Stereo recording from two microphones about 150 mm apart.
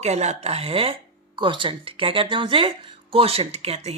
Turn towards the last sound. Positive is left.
turn(degrees=-45)  # may be behind; listen again after turning